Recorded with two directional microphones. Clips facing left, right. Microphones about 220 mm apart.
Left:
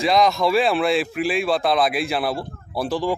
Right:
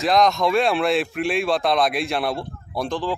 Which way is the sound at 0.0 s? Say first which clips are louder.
Even; centre (ahead or behind).